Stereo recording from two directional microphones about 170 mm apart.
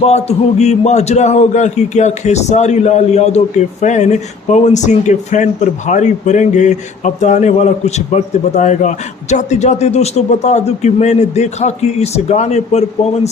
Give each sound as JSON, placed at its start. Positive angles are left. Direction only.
{"t": 0.0, "sound": "a man's voice", "side_deg": 40}